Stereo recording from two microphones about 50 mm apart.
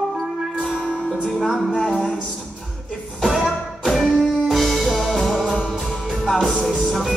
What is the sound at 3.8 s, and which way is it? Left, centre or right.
Music, centre.